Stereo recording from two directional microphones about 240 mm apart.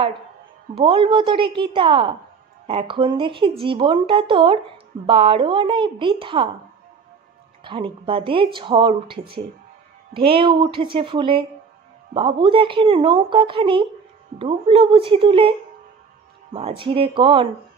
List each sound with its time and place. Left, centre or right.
0.7 s speech: right
7.6 s speech: right
16.5 s speech: right